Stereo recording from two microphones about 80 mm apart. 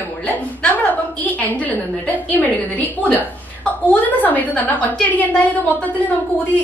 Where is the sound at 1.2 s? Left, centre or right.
Left.